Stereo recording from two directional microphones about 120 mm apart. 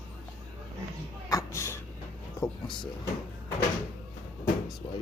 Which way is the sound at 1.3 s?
25° left (ahead or behind).